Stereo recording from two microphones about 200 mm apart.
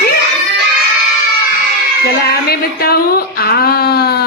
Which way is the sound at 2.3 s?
50° left (ahead or behind).